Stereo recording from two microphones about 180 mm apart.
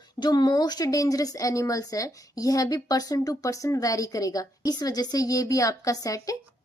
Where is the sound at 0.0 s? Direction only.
25° left (ahead or behind).